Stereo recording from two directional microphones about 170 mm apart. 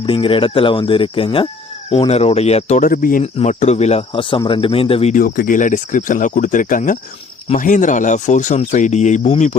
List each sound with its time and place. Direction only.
0.0 s speech: 30° left (ahead or behind); by 3.2 s 55° left (ahead or behind)
3.3 s speech: 45° left (ahead or behind)
5.1 s speech: 55° left (ahead or behind)